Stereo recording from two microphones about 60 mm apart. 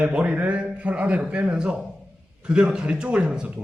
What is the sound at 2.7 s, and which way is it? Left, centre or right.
Speech, centre.